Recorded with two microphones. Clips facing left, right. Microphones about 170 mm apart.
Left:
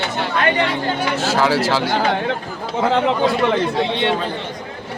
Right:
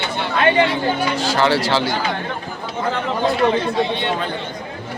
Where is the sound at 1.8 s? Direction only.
65° left (ahead or behind).